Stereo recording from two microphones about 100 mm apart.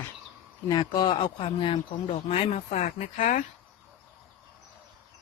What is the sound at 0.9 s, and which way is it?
Speech, 45° left (ahead or behind).